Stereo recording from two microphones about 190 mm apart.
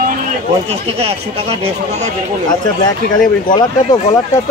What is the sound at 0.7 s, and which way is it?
Speech, 30° right (ahead or behind).